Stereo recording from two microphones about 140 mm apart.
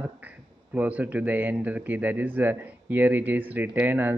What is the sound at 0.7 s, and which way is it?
Speech, 10° right (ahead or behind).